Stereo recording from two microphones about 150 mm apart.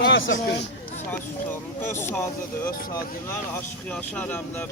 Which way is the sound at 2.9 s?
20° left (ahead or behind).